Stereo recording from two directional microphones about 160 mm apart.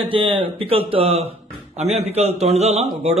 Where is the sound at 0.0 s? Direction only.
35° right (ahead or behind).